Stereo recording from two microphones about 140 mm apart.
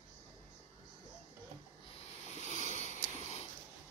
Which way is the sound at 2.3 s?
55° left (ahead or behind).